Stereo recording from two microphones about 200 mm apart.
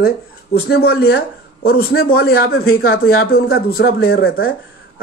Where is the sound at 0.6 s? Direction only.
50° left (ahead or behind).